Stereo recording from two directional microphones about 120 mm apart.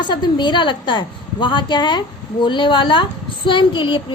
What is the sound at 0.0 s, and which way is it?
A woman's voice, 40° left (ahead or behind).